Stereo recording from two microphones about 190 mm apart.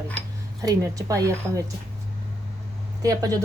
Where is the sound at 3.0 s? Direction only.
20° right (ahead or behind).